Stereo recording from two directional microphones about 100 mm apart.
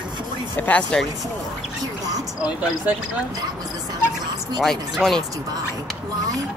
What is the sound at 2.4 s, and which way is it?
Speech, 10° right (ahead or behind).